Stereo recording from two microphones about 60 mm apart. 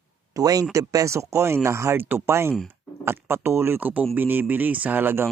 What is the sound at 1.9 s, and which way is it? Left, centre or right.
Speech, right.